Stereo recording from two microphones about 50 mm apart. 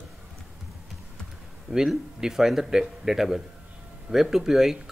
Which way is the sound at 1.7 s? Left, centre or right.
Centre.